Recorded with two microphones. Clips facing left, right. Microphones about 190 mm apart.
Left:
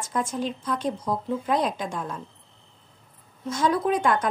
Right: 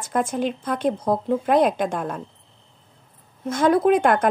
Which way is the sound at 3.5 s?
55° right (ahead or behind).